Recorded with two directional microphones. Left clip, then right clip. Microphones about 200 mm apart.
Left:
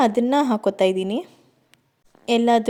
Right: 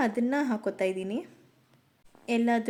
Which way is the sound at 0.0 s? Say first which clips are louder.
Left 10 dB; 40° left (ahead or behind).